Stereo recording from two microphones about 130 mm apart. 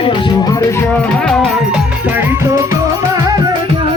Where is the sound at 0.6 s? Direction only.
20° left (ahead or behind).